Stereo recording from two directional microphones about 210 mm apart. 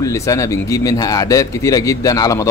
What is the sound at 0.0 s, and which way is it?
A man's voice, 15° left (ahead or behind).